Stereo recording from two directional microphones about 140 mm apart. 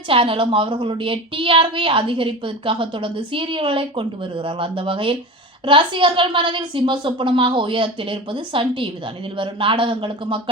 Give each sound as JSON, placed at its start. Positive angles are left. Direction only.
{"t": 0.1, "sound": "a woman's voice", "side_deg": -40}